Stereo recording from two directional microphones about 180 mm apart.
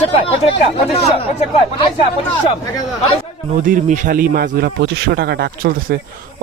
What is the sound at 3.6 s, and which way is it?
Speech, 45° right (ahead or behind).